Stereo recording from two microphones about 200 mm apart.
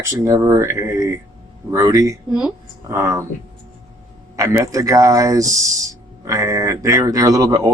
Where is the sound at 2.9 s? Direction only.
15° right (ahead or behind).